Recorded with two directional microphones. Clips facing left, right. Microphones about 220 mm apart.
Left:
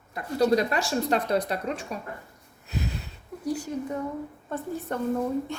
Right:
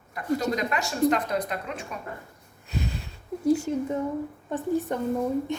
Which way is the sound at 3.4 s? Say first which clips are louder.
Right 6 dB; 25° right (ahead or behind).